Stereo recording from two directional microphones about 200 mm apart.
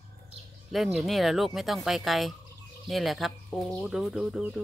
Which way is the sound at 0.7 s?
Centre (ahead or behind).